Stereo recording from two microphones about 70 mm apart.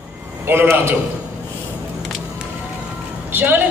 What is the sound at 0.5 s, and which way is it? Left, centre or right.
Speech, right.